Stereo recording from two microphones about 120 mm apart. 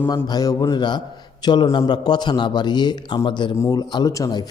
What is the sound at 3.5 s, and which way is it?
Speech, 25° left (ahead or behind).